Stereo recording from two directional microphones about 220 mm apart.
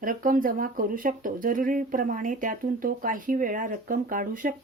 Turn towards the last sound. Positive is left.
turn(degrees=-40)  # may be behind; listen again after turning